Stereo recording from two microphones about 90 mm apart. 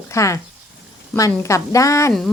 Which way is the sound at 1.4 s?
35° left (ahead or behind).